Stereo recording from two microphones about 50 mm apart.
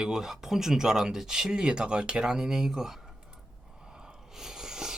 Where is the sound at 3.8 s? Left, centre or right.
Centre.